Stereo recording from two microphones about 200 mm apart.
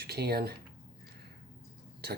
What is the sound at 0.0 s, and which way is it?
Speech, 55° right (ahead or behind).